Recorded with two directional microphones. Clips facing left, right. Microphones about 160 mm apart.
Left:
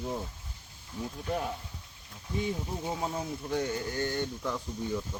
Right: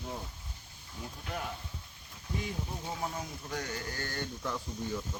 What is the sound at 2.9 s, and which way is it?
Speech, 25° left (ahead or behind).